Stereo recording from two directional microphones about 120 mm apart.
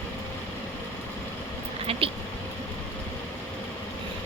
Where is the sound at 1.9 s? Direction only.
50° right (ahead or behind).